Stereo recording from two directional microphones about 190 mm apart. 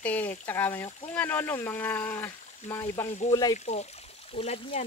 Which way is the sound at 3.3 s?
20° left (ahead or behind).